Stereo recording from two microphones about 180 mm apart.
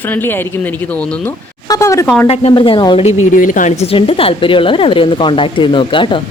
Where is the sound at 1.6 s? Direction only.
20° left (ahead or behind).